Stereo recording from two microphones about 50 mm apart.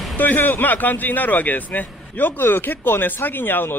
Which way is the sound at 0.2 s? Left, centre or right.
Left.